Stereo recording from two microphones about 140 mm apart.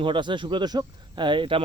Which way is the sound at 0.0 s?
35° right (ahead or behind).